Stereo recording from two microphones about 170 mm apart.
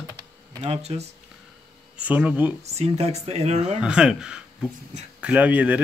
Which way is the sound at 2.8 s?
40° right (ahead or behind).